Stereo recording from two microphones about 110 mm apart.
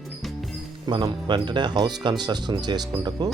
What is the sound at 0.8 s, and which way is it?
Speech, 40° right (ahead or behind).